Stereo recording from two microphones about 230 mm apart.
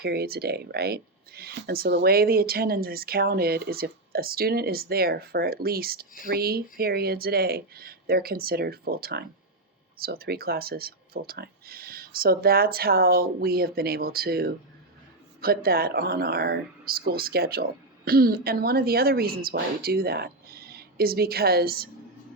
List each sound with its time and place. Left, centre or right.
0.0 s speech: right